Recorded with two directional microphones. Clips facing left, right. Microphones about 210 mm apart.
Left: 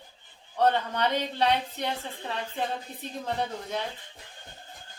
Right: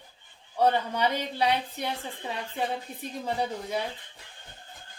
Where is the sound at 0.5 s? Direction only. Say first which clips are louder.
Even; 10° right (ahead or behind).